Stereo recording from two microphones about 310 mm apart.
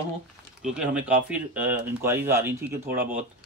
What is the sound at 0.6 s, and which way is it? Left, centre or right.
Speech, centre.